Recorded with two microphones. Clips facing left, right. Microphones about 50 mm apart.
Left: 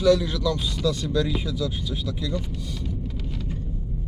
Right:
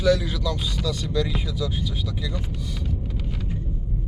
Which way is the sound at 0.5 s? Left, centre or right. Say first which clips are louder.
Left 2 dB; centre.